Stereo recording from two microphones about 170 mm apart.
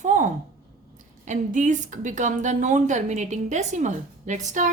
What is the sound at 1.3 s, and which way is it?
Speech, 45° right (ahead or behind).